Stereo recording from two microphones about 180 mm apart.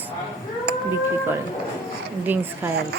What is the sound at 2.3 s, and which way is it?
Speech, 10° right (ahead or behind).